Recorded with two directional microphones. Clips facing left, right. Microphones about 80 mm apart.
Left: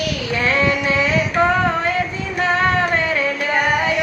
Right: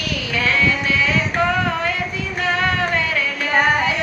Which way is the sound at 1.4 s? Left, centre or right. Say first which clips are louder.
Left 4 dB; left.